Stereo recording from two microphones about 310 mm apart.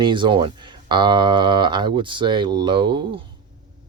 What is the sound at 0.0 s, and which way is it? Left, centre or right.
Speech, centre.